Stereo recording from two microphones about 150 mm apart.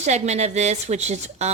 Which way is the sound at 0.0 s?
50° right (ahead or behind).